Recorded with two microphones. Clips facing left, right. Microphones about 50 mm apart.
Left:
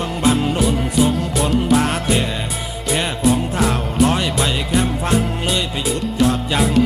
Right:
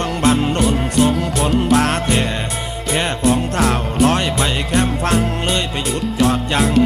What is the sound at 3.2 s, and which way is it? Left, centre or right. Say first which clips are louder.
Music: right 1 dB; centre.